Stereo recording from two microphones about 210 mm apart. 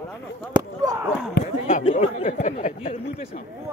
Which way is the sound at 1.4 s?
40° left (ahead or behind).